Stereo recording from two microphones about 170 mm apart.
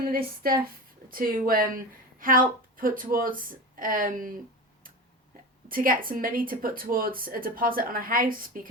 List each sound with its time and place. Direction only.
0.1 s speech: 60° right (ahead or behind)
5.6 s speech: 55° right (ahead or behind)